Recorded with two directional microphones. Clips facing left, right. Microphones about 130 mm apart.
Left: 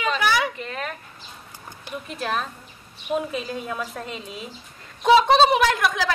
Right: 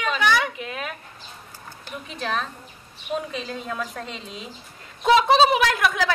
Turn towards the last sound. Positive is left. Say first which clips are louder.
# left 1 dB
turn(degrees=0)  # may be behind; listen again after turning